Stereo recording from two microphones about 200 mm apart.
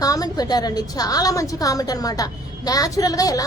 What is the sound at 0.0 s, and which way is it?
A woman's voice, 20° left (ahead or behind).